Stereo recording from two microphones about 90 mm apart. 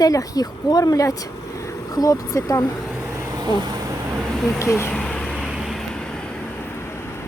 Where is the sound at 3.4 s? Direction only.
45° right (ahead or behind).